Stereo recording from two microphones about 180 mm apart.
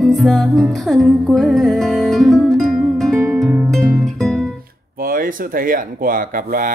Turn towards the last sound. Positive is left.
turn(degrees=-50)  # may be behind; listen again after turning